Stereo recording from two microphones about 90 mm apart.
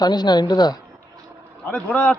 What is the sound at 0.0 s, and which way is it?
Speech, 50° left (ahead or behind).